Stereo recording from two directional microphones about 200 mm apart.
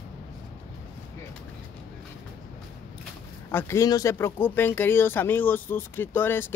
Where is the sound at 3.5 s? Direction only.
15° left (ahead or behind).